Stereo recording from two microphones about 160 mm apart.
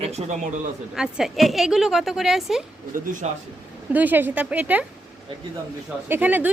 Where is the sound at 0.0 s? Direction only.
40° right (ahead or behind).